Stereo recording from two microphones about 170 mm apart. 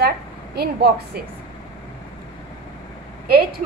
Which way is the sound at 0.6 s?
70° right (ahead or behind).